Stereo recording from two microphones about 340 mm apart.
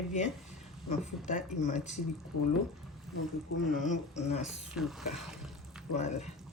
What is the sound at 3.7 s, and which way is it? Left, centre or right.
Speech, left.